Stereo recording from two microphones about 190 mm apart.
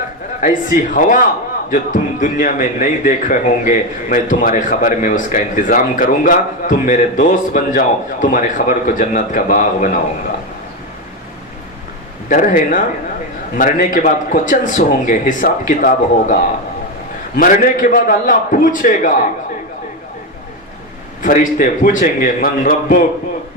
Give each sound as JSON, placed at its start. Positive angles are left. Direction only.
{"t": 0.4, "sound": "speech", "side_deg": 45}
{"t": 12.3, "sound": "speech", "side_deg": 45}
{"t": 17.3, "sound": "speech", "side_deg": 45}
{"t": 21.2, "sound": "speech", "side_deg": 45}